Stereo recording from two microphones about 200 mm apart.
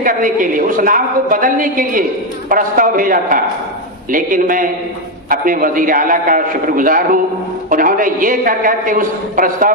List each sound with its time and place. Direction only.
0.0 s a woman's voice: 45° right (ahead or behind)